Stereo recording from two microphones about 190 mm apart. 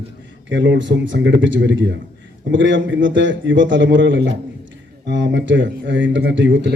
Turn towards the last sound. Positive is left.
turn(degrees=-70)  # may be behind; listen again after turning